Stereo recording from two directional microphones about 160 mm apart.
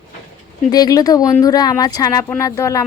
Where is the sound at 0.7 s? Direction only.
25° left (ahead or behind).